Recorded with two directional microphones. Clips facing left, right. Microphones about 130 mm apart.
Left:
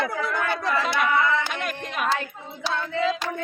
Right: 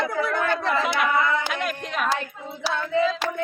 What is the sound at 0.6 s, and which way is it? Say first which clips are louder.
Speech: right 1 dB; 15° right (ahead or behind).